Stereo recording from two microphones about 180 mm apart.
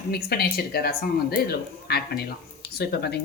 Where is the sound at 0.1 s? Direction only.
60° left (ahead or behind).